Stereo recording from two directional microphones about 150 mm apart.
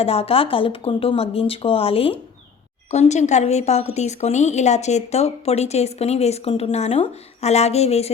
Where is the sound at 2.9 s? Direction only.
50° left (ahead or behind).